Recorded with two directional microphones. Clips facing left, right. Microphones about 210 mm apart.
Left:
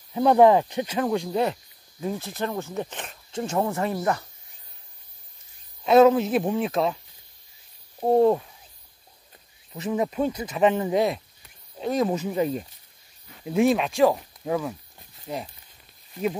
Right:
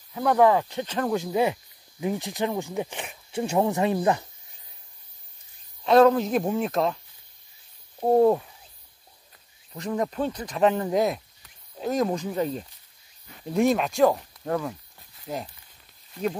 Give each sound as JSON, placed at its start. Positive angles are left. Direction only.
{"t": 0.1, "sound": "speech", "side_deg": 25}
{"t": 1.1, "sound": "speech", "side_deg": -5}
{"t": 5.9, "sound": "speech", "side_deg": 5}
{"t": 8.0, "sound": "speech", "side_deg": 0}
{"t": 9.8, "sound": "speech", "side_deg": 5}